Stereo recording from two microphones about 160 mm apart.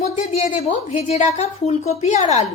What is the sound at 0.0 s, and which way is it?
A woman's voice, 40° left (ahead or behind).